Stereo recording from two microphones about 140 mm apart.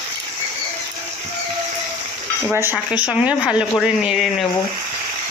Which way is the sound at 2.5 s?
15° right (ahead or behind).